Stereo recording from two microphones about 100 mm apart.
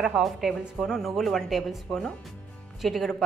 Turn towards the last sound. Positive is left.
turn(degrees=0)  # may be behind; listen again after turning